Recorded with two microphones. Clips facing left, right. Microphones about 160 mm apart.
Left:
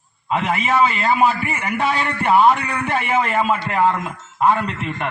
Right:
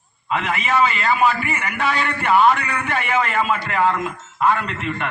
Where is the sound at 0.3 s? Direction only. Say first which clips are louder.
Left 2 dB; 30° left (ahead or behind).